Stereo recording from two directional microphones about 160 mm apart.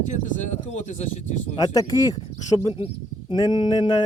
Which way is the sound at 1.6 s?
25° left (ahead or behind).